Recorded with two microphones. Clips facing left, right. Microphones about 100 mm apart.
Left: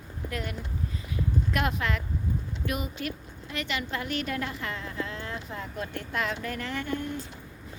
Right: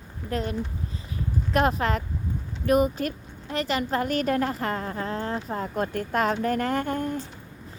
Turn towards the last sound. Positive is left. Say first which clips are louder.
# right 6 dB
turn(degrees=-45)  # may be behind; listen again after turning